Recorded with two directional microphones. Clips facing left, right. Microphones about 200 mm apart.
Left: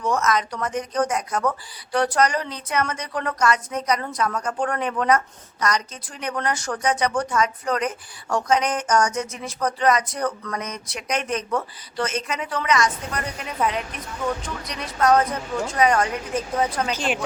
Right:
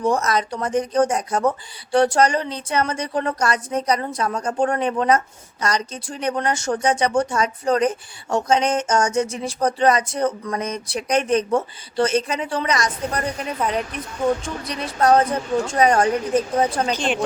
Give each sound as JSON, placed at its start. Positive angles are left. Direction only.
{"t": 0.0, "sound": "a woman's voice", "side_deg": -35}